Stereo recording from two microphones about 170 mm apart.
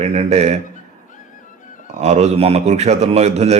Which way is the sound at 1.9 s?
40° right (ahead or behind).